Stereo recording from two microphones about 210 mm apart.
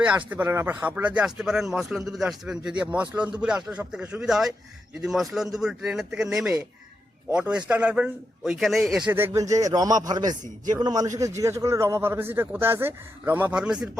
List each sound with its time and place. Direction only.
0.0 s a man's voice: 5° right (ahead or behind)